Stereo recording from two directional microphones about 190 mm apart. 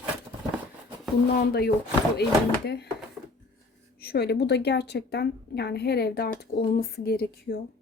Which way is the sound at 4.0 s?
55° left (ahead or behind).